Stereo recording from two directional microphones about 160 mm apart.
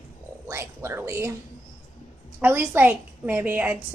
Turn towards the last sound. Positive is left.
turn(degrees=-10)  # may be behind; listen again after turning